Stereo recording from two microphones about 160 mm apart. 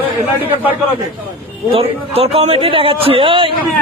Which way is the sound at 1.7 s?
40° right (ahead or behind).